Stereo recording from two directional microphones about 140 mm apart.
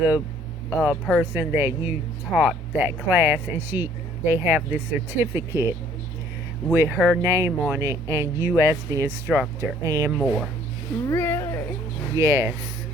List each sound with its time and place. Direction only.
0.7 s speech: 10° right (ahead or behind)
6.7 s speech: 15° right (ahead or behind)
10.1 s speech: centre (ahead or behind)
11.1 s cat: 15° left (ahead or behind)
12.1 s speech: 20° right (ahead or behind)